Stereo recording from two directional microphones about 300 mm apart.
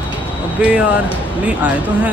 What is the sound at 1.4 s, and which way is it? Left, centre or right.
Speech, centre.